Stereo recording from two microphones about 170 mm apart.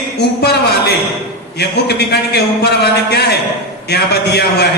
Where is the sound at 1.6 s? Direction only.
75° left (ahead or behind).